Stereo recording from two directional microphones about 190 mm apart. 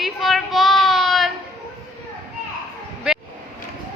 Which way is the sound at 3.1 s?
5° right (ahead or behind).